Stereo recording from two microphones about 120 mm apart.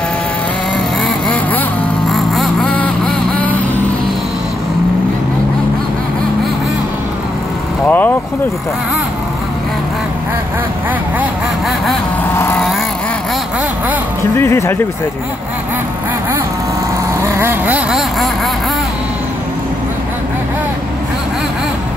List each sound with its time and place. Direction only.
2.0 s vehicle: centre (ahead or behind)
7.8 s vehicle: 15° left (ahead or behind)
14.3 s speech: 25° left (ahead or behind)
17.4 s speech: 15° right (ahead or behind)